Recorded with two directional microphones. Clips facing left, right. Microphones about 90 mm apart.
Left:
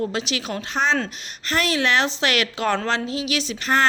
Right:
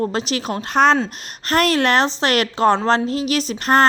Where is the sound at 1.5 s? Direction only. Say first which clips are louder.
Right 5 dB; 50° right (ahead or behind).